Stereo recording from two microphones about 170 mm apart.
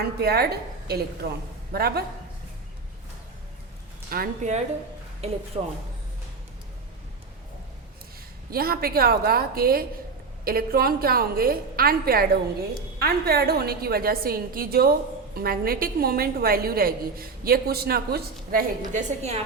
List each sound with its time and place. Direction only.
0.0 s a woman's voice: 65° right (ahead or behind)
4.1 s speech: 55° right (ahead or behind)
5.5 s speech: 35° right (ahead or behind)
8.4 s a woman's voice: 60° right (ahead or behind); by 19.4 s 45° right (ahead or behind)